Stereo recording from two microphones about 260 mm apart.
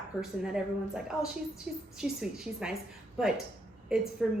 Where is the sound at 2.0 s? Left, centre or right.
Centre.